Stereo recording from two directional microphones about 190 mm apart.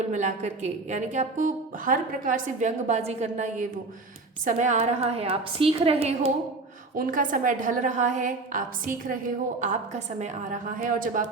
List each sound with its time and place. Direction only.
0.1 s a woman's voice: 40° right (ahead or behind)
6.9 s a woman's voice: 45° right (ahead or behind)